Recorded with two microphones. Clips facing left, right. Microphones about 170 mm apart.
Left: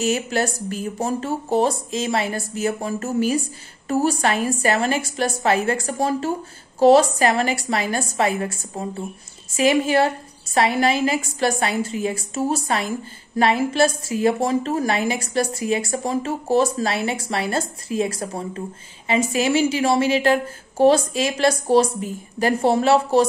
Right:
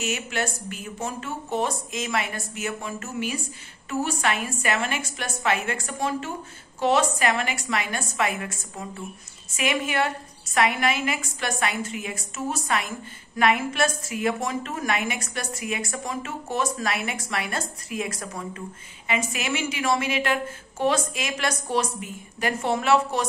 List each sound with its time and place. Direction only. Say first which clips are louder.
0.0 s a woman's voice: left 7 dB; 35° left (ahead or behind)